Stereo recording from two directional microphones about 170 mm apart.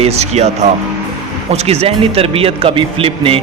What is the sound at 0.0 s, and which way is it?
Speech, 40° right (ahead or behind).